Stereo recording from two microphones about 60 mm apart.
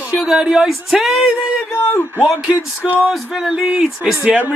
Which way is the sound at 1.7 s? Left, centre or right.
Left.